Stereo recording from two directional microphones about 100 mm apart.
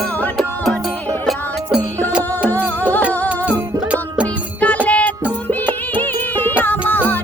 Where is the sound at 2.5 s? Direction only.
20° left (ahead or behind).